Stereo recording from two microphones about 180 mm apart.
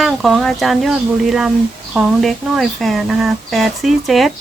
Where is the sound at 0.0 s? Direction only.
Centre (ahead or behind).